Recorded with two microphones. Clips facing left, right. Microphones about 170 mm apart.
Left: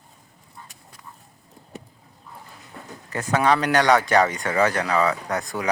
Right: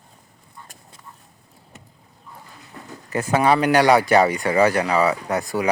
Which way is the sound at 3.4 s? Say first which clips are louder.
Right 3 dB; 5° right (ahead or behind).